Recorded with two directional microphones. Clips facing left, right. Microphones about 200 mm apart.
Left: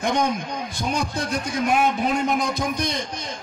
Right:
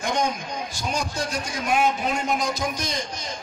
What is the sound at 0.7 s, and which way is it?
A man's voice, 55° left (ahead or behind).